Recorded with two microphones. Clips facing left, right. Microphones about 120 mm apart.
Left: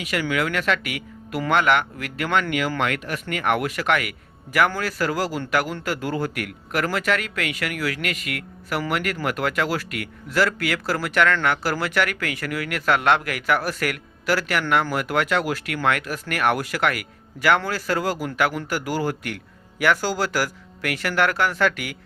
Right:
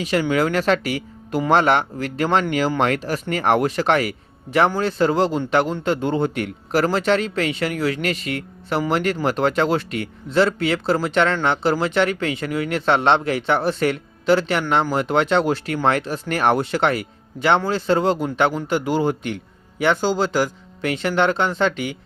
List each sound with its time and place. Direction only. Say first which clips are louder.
0.0 s speech: right 5 dB; 30° right (ahead or behind)